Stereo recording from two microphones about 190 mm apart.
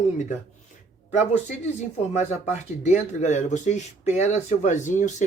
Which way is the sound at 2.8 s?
40° left (ahead or behind).